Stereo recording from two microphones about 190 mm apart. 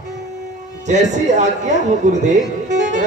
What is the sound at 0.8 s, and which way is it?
Speech, 40° right (ahead or behind).